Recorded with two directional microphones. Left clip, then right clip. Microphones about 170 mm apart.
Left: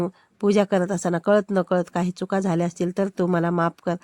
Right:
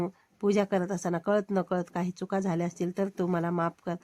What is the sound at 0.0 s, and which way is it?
Speech, 35° left (ahead or behind).